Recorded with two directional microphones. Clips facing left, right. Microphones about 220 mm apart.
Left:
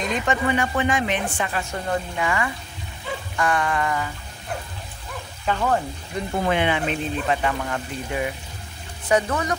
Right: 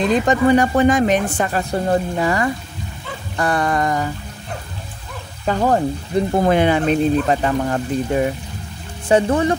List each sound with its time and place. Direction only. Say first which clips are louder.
0.0 s speech: right 8 dB; 35° right (ahead or behind)
5.4 s speech: right 6 dB; 40° right (ahead or behind)